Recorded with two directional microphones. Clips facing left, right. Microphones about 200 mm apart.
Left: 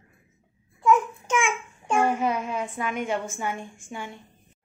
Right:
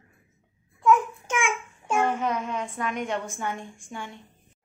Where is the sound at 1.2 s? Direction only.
10° right (ahead or behind).